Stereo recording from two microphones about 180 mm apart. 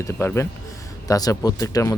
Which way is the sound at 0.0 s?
15° left (ahead or behind).